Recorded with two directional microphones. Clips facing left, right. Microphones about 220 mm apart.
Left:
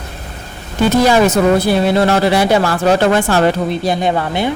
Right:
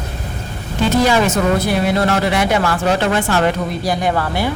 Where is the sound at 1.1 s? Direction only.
35° left (ahead or behind).